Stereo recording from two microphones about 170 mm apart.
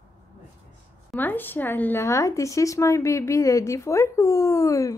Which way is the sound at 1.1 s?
10° left (ahead or behind).